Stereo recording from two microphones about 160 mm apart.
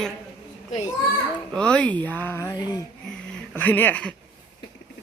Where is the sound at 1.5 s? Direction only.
5° left (ahead or behind).